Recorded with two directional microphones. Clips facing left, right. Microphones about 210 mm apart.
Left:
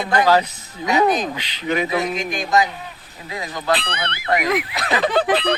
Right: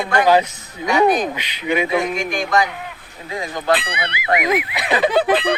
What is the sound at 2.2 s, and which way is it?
Music, 50° right (ahead or behind).